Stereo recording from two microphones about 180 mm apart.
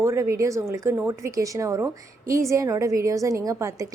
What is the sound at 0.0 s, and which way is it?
A woman's voice, 15° right (ahead or behind).